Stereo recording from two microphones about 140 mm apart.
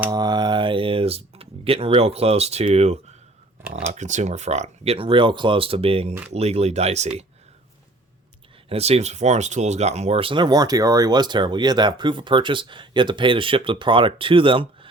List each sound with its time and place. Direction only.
0.1 s a sound: 30° right (ahead or behind); by 3.0 s 50° right (ahead or behind)
3.8 s speech: 55° right (ahead or behind)
8.7 s speech: 50° right (ahead or behind)